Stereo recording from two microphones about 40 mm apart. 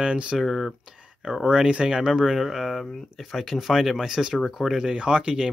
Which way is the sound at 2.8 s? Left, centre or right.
Centre.